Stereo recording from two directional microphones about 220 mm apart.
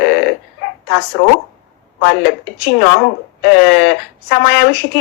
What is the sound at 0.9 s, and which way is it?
Speech, 50° left (ahead or behind).